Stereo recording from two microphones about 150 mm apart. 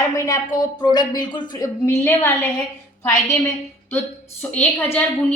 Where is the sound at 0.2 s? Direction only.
25° left (ahead or behind).